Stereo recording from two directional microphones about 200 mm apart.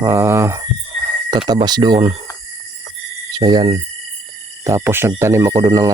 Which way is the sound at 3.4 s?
20° right (ahead or behind).